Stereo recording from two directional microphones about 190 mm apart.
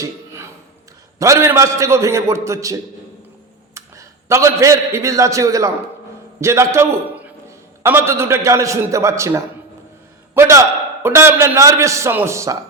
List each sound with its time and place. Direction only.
0.0 s a sound: 15° right (ahead or behind)
1.2 s a man's voice: 15° right (ahead or behind)
3.8 s a man's voice: 15° right (ahead or behind)